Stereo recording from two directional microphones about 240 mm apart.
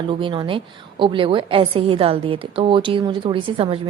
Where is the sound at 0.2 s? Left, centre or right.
Right.